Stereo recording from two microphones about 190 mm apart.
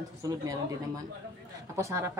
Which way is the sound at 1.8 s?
15° right (ahead or behind).